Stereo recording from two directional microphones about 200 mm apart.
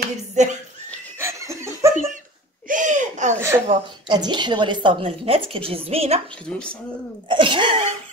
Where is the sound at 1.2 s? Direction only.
15° right (ahead or behind).